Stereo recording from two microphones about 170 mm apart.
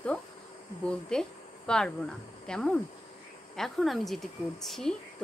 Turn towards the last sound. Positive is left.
turn(degrees=0)  # may be behind; listen again after turning